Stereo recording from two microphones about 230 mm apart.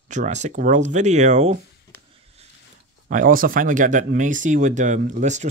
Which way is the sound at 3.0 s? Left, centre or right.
Right.